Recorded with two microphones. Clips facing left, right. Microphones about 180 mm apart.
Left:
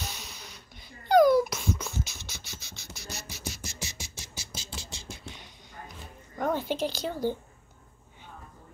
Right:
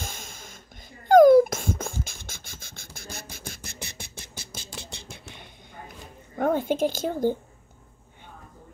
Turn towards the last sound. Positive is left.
turn(degrees=-50)  # may be behind; listen again after turning